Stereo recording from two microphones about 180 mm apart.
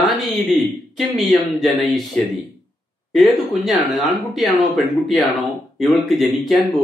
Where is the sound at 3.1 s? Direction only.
Centre (ahead or behind).